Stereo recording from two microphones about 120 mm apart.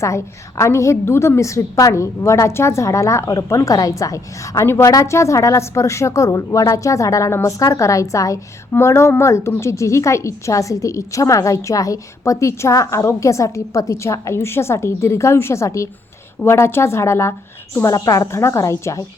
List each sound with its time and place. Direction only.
0.0 s a woman's voice: 25° left (ahead or behind)